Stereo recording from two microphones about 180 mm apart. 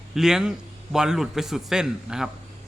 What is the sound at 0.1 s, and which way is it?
A man's voice, 5° right (ahead or behind).